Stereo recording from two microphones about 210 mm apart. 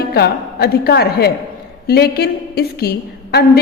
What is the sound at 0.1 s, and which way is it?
A woman's voice, 50° left (ahead or behind).